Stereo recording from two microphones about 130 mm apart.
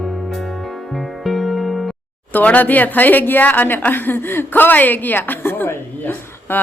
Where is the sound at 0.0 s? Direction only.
Centre (ahead or behind).